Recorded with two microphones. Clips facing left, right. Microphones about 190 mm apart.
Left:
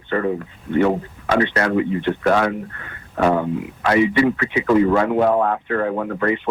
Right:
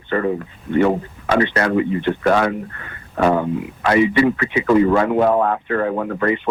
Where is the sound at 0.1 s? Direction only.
20° right (ahead or behind).